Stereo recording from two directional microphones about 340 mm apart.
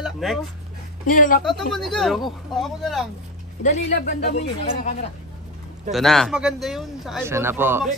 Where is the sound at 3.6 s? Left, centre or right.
Left.